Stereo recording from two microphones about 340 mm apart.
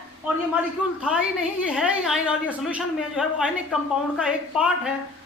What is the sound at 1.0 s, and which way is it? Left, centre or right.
A woman's voice, centre.